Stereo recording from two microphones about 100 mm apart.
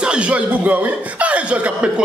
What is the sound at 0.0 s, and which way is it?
Speech, 10° right (ahead or behind).